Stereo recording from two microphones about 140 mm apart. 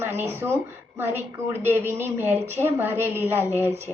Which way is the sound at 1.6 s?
15° right (ahead or behind).